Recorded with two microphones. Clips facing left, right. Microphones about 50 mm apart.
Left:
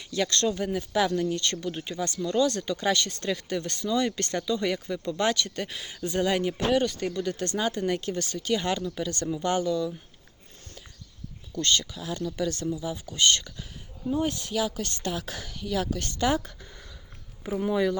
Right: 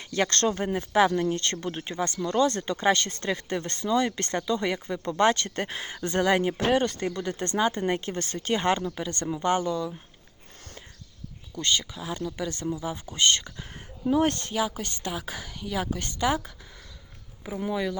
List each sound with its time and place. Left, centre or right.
0.0 s speech: right
6.0 s speech: right
6.2 s speech: right
6.8 s speech: right
7.2 s speech: right
9.0 s speech: right
11.5 s a woman's voice: centre
14.1 s speech: right
14.5 s a woman's voice: centre
16.1 s a woman's voice: centre
17.5 s speech: centre